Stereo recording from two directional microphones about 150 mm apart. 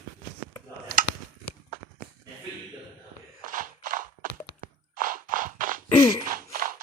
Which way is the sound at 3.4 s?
65° right (ahead or behind).